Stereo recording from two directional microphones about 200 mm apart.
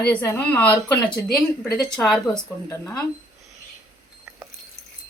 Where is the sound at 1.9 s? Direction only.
Centre (ahead or behind).